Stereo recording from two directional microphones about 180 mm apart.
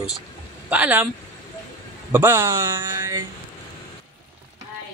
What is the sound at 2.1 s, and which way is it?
Speech, 15° right (ahead or behind).